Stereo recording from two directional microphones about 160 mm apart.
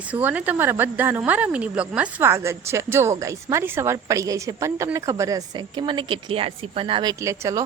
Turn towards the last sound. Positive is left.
turn(degrees=-20)  # may be behind; listen again after turning